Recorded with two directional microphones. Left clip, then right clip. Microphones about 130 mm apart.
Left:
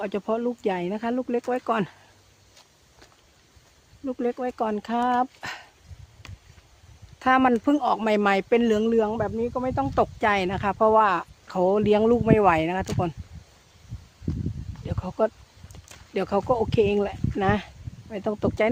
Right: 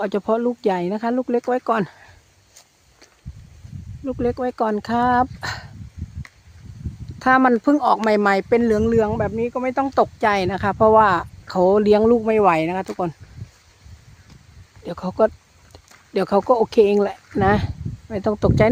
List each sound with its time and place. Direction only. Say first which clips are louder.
0.0 s speech: right 6 dB; 55° right (ahead or behind)
4.0 s a man's voice: right 5 dB; 30° right (ahead or behind)
4.3 s speech: right 6 dB; 45° right (ahead or behind)
7.2 s a man's voice: right 4 dB; 45° right (ahead or behind)
9.0 s speech: right 4 dB; 90° right
9.9 s speech: right 4 dB; 50° right (ahead or behind)
14.8 s speech: right 6 dB; 50° right (ahead or behind)